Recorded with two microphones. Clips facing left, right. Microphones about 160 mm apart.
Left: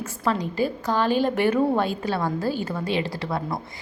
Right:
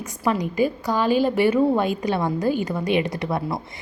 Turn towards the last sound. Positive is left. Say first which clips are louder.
# right 4 dB
turn(degrees=-20)  # may be behind; listen again after turning